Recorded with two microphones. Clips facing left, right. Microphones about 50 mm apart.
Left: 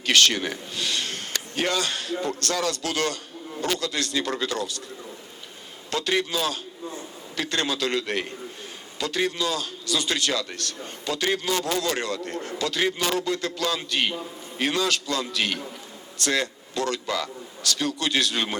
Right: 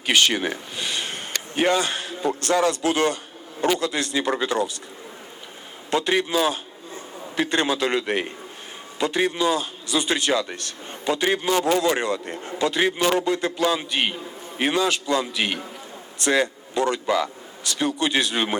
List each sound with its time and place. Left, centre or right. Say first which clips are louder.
0.0 s a man's voice: right 1 dB; centre
5.9 s a man's voice: right 4 dB; right